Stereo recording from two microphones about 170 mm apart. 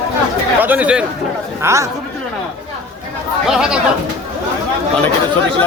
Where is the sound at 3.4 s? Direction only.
5° right (ahead or behind).